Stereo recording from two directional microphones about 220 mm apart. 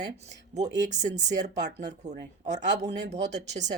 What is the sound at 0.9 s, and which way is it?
Speech, 35° right (ahead or behind).